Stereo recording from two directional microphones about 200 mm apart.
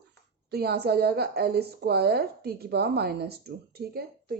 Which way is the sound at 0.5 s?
55° right (ahead or behind).